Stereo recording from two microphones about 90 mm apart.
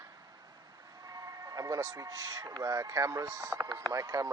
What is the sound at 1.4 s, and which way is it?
Speech, 40° right (ahead or behind).